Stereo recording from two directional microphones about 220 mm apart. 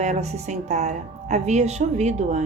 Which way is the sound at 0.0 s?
30° right (ahead or behind).